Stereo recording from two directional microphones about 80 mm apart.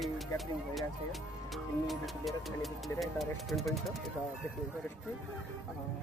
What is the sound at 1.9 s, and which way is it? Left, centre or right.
Speech, centre.